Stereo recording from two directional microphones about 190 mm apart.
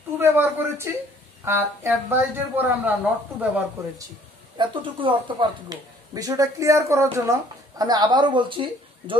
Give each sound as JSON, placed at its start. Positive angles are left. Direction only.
{"t": 0.2, "sound": "speech", "side_deg": -10}
{"t": 4.6, "sound": "speech", "side_deg": -25}